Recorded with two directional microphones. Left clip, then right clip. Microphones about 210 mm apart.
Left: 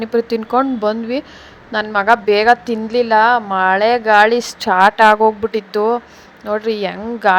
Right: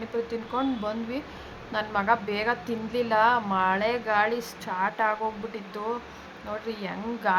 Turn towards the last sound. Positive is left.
turn(degrees=35)  # may be behind; listen again after turning